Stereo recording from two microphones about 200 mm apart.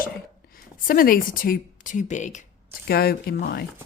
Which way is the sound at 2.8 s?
50° left (ahead or behind).